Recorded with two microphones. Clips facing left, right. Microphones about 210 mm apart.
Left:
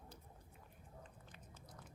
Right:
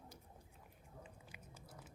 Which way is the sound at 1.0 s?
10° right (ahead or behind).